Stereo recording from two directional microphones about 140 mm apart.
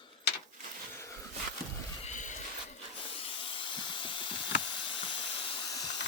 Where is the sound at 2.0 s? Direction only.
60° left (ahead or behind).